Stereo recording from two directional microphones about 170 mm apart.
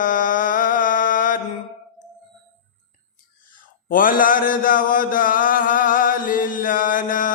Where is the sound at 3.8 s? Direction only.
55° left (ahead or behind).